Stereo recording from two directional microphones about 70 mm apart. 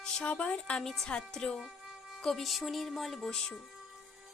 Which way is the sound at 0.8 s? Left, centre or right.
Centre.